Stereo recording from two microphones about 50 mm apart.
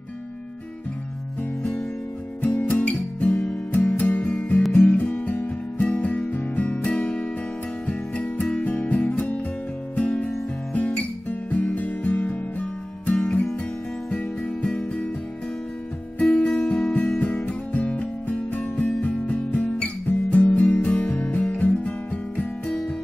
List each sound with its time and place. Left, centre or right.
1.6 s music: centre
10.7 s guitar: left
13.2 s music: left
16.2 s music: left